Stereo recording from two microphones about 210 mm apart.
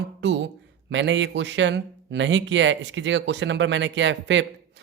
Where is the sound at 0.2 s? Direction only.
55° right (ahead or behind).